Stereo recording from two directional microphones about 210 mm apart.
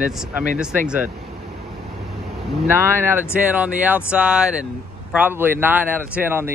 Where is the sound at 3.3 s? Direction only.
5° right (ahead or behind).